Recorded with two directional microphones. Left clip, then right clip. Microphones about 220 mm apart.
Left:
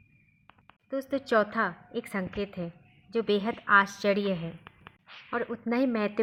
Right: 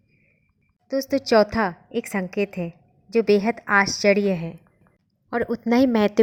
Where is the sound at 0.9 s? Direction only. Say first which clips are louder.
Right 8 dB; 30° right (ahead or behind).